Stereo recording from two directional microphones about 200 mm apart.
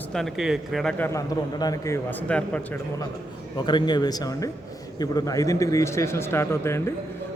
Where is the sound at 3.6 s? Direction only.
20° left (ahead or behind).